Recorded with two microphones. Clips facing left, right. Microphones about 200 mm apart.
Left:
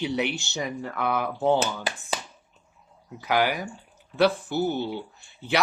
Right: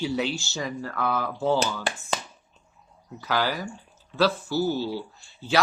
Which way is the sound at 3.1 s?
15° left (ahead or behind).